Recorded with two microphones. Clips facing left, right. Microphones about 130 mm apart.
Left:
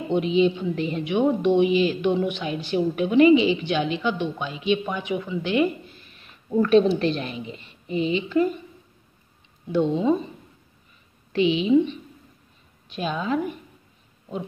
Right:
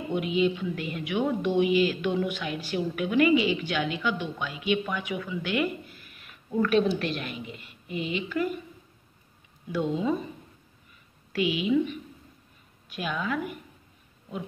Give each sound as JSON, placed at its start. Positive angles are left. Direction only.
{"t": 0.1, "sound": "a woman's voice", "side_deg": 25}
{"t": 9.7, "sound": "a woman's voice", "side_deg": 25}
{"t": 11.3, "sound": "a woman's voice", "side_deg": 25}